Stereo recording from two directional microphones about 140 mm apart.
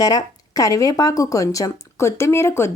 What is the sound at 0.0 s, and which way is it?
Speech, 25° left (ahead or behind).